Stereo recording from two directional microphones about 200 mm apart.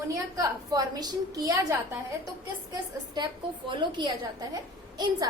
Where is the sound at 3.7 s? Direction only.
20° right (ahead or behind).